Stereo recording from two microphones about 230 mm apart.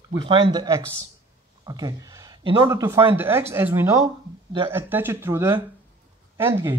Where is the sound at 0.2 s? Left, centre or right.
Right.